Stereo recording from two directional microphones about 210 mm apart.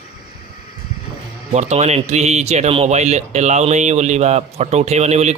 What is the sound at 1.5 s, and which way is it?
Speech, 30° right (ahead or behind).